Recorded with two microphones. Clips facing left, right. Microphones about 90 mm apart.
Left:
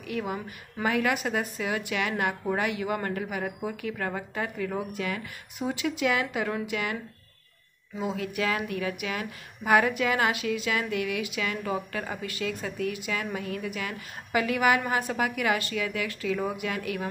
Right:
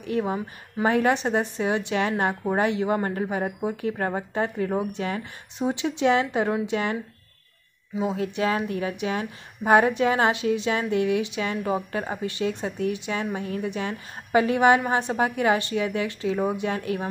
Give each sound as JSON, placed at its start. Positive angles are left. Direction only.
{"t": 0.0, "sound": "a woman's voice", "side_deg": -30}
{"t": 8.0, "sound": "a woman's voice", "side_deg": -25}